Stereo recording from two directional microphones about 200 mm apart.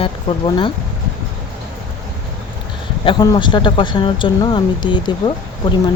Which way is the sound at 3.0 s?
20° left (ahead or behind).